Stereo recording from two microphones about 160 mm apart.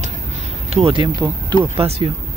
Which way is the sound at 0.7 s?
35° right (ahead or behind).